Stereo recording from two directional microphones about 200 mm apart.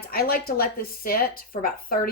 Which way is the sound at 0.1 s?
45° left (ahead or behind).